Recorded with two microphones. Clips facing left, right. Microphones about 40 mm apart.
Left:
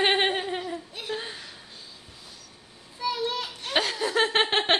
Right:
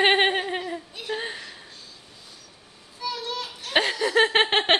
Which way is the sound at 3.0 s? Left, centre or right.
Left.